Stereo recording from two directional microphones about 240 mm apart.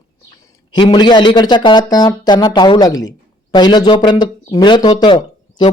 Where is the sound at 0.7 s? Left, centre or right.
Centre.